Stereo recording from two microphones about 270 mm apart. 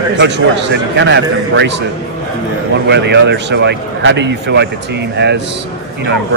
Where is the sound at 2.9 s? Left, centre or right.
Right.